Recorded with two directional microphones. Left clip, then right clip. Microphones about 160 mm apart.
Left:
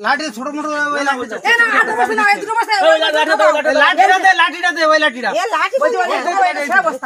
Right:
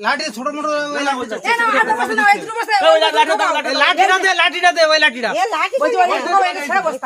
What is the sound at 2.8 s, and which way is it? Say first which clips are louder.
A man's voice: right 1 dB; 30° right (ahead or behind).